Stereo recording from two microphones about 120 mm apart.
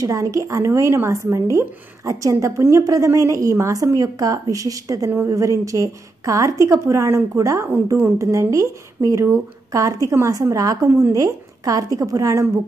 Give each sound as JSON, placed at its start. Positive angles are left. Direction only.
{"t": 0.0, "sound": "speech", "side_deg": -25}